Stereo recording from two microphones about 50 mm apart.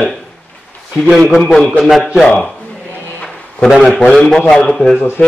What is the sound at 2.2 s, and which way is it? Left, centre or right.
Mantra, centre.